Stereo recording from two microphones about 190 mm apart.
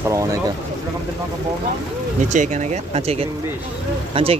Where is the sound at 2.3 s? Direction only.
40° right (ahead or behind).